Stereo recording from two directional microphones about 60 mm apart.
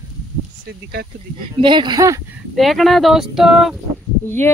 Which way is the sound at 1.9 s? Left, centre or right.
Right.